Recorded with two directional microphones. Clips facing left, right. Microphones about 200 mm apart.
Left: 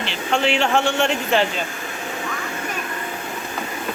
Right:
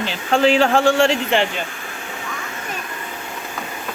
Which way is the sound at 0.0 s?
35° right (ahead or behind).